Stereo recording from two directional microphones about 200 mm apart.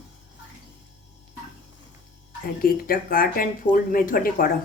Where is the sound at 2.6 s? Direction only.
45° left (ahead or behind).